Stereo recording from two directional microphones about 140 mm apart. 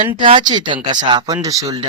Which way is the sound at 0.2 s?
35° right (ahead or behind).